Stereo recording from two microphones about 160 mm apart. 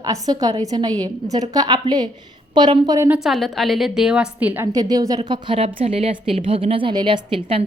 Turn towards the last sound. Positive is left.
turn(degrees=-35)  # may be behind; listen again after turning